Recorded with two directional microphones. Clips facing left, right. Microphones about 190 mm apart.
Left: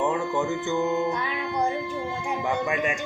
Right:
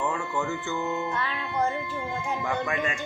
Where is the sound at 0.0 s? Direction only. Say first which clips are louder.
Left 4 dB; 15° left (ahead or behind).